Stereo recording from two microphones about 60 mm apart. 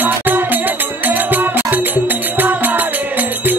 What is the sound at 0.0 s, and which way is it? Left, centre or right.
Music, right.